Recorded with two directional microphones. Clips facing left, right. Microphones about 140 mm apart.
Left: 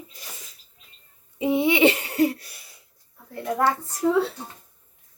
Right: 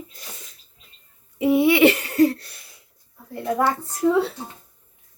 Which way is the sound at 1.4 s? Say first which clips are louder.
Right 4 dB; 20° left (ahead or behind).